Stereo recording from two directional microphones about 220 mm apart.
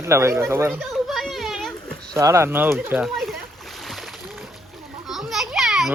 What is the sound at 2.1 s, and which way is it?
Speech, 15° right (ahead or behind).